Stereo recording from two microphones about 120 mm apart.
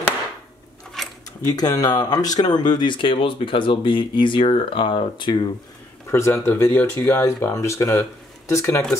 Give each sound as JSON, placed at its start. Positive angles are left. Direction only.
{"t": 1.0, "sound": "a sound", "side_deg": 0}
{"t": 1.5, "sound": "speech", "side_deg": 30}
{"t": 6.1, "sound": "speech", "side_deg": 20}